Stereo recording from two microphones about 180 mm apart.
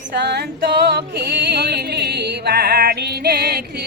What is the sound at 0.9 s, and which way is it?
Music, 70° right (ahead or behind).